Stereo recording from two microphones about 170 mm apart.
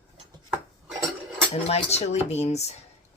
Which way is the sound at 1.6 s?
40° left (ahead or behind).